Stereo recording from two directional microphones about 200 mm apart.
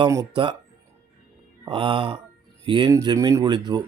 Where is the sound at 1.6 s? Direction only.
25° right (ahead or behind).